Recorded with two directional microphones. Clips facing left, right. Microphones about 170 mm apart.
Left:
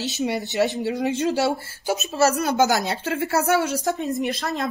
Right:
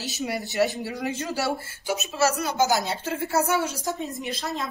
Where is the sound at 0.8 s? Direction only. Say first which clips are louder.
Left 6 dB; 25° left (ahead or behind).